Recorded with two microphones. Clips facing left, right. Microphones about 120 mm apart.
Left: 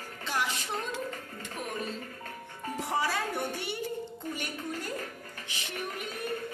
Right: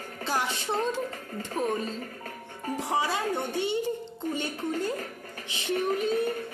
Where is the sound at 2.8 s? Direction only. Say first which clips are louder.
Right 2 dB; 20° right (ahead or behind).